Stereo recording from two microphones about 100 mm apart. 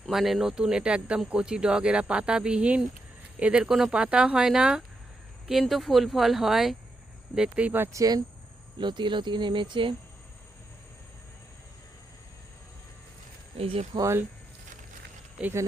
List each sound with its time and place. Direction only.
0.0 s speech: centre (ahead or behind)
7.9 s speech: 40° right (ahead or behind)
8.8 s speech: 50° right (ahead or behind)
13.6 s speech: 70° right (ahead or behind)
14.0 s speech: 25° right (ahead or behind)
15.4 s speech: 10° right (ahead or behind)